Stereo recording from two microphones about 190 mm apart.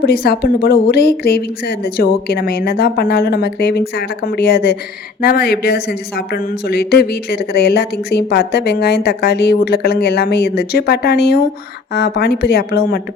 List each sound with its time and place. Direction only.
0.0 s speech: 55° left (ahead or behind)